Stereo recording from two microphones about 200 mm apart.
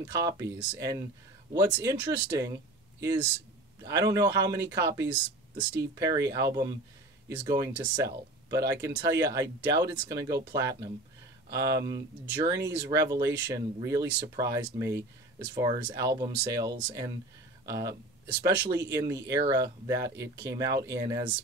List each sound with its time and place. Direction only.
0.0 s speech: 15° right (ahead or behind)